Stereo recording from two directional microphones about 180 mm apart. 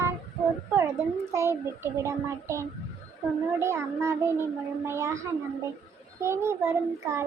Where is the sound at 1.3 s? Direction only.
15° right (ahead or behind).